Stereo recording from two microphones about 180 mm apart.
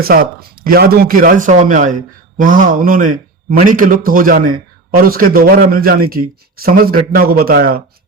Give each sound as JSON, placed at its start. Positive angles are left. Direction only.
{"t": 0.0, "sound": "a man's voice", "side_deg": -55}